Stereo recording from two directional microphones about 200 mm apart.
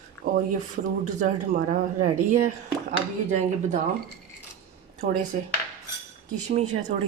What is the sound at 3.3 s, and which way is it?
Speech, 35° right (ahead or behind).